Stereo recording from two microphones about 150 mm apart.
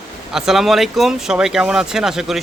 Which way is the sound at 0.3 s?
Centre (ahead or behind).